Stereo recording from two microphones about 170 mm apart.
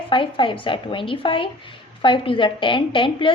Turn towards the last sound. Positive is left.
turn(degrees=30)  # may be behind; listen again after turning